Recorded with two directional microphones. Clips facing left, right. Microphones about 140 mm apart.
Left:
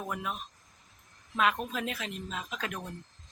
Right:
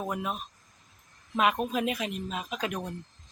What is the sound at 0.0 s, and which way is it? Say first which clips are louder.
Speech: right 4 dB; 25° right (ahead or behind).